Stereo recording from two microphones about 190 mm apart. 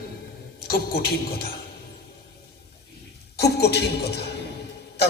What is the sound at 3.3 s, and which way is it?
A man's voice, 60° left (ahead or behind).